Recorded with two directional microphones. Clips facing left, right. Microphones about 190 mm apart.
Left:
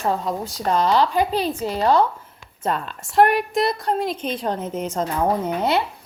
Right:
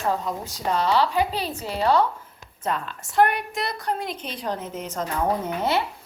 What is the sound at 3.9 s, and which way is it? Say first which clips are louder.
A woman's voice: left 6 dB; 30° left (ahead or behind).